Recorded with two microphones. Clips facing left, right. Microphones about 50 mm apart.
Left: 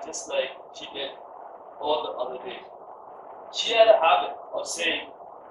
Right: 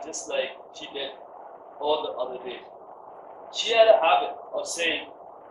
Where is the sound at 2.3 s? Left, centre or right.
Left.